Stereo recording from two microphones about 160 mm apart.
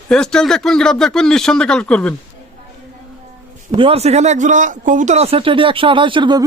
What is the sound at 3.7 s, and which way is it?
Speech, 35° right (ahead or behind).